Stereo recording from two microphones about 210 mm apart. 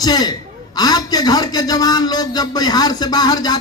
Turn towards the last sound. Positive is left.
turn(degrees=20)  # may be behind; listen again after turning